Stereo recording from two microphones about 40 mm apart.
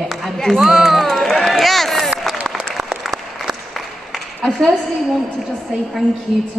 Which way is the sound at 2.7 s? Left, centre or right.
Centre.